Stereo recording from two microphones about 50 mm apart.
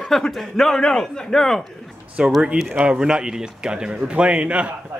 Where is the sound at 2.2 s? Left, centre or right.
Centre.